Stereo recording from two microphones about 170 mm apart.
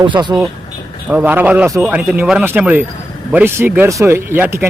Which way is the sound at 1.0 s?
10° right (ahead or behind).